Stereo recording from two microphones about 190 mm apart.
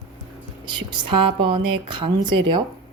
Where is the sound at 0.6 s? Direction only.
25° right (ahead or behind).